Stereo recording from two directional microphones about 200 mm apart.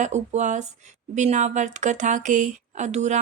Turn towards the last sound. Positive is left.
turn(degrees=-35)  # may be behind; listen again after turning